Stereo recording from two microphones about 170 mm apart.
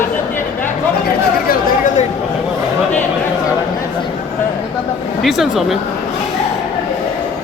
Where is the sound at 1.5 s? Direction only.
50° left (ahead or behind).